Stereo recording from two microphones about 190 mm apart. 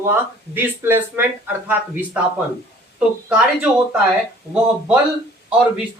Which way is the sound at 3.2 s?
5° right (ahead or behind).